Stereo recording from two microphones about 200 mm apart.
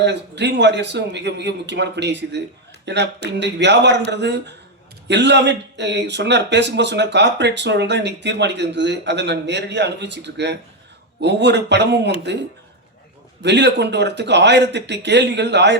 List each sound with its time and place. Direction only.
0.0 s speech: 60° right (ahead or behind)
13.4 s speech: 60° right (ahead or behind)